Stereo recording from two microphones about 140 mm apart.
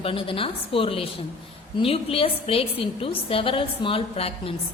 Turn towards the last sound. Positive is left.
turn(degrees=45)  # may be behind; listen again after turning